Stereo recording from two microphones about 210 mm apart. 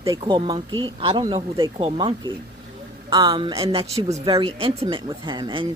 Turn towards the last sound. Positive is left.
turn(degrees=-20)  # may be behind; listen again after turning